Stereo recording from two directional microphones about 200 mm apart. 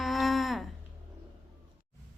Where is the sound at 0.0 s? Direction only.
Centre (ahead or behind).